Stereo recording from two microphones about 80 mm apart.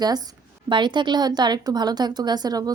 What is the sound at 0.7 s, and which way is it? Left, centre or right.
A woman's voice, right.